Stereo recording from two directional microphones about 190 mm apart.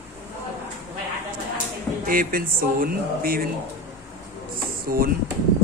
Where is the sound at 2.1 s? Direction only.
50° right (ahead or behind).